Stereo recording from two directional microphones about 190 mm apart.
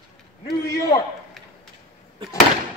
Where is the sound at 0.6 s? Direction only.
20° left (ahead or behind).